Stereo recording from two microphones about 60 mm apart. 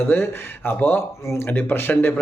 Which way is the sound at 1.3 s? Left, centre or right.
Left.